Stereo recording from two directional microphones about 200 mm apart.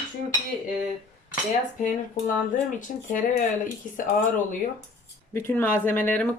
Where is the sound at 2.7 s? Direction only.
45° left (ahead or behind).